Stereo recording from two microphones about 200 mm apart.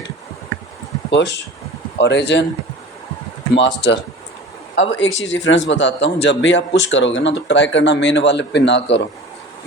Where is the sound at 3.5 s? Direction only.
60° left (ahead or behind).